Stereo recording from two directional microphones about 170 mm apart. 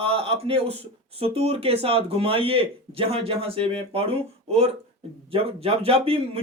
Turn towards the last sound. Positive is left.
turn(degrees=-35)  # may be behind; listen again after turning